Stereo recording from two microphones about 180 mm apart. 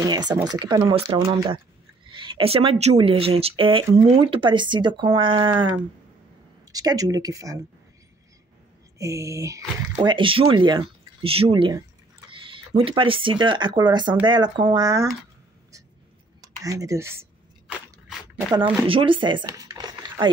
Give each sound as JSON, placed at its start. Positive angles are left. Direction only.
{"t": 0.0, "sound": "speech", "side_deg": -20}
{"t": 8.9, "sound": "speech", "side_deg": -15}
{"t": 16.3, "sound": "a sound", "side_deg": -20}
{"t": 18.9, "sound": "speech", "side_deg": -30}